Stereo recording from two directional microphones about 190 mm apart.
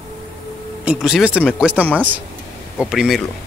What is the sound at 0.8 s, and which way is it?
Speech, 5° right (ahead or behind).